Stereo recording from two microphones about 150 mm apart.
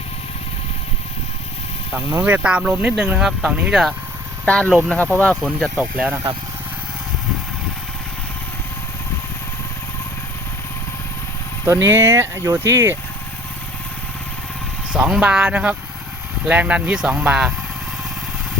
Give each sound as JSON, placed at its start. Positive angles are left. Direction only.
{"t": 2.2, "sound": "speech", "side_deg": -10}
{"t": 4.4, "sound": "speech", "side_deg": 10}
{"t": 5.7, "sound": "speech", "side_deg": -5}
{"t": 11.6, "sound": "speech", "side_deg": -20}
{"t": 14.9, "sound": "speech", "side_deg": -5}